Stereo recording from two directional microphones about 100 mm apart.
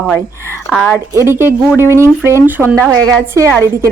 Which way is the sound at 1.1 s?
25° right (ahead or behind).